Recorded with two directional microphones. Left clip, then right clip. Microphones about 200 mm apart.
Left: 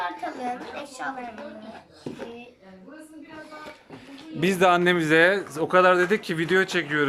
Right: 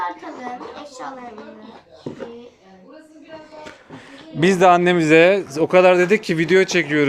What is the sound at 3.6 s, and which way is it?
Speech, centre (ahead or behind).